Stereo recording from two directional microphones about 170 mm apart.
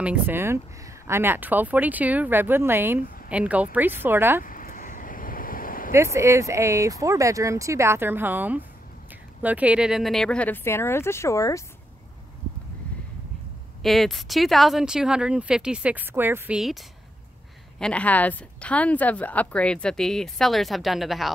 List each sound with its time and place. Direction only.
0.0 s speech: 10° right (ahead or behind)
4.4 s a sound: 55° left (ahead or behind)
5.9 s speech: 15° right (ahead or behind); by 11.6 s 20° left (ahead or behind)
13.8 s speech: centre (ahead or behind)
17.7 s speech: 5° left (ahead or behind)